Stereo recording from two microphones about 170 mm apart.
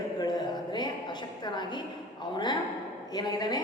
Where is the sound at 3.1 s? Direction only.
25° left (ahead or behind).